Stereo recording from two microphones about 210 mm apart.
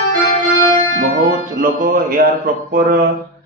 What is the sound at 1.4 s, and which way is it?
A man's voice, 40° right (ahead or behind).